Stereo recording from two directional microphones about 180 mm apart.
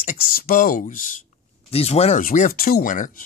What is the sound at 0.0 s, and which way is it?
Speech, 55° left (ahead or behind).